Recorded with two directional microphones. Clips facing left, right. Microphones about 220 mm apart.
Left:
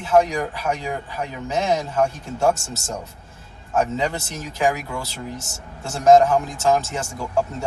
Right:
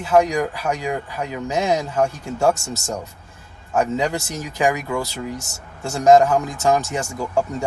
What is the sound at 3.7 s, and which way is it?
Speech, 15° right (ahead or behind).